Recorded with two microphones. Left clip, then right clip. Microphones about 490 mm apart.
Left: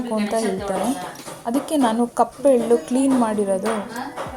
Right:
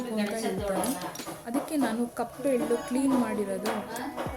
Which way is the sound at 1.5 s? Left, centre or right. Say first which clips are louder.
Left 10 dB; right.